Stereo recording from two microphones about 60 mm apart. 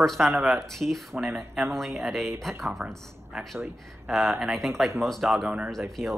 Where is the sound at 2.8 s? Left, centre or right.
Centre.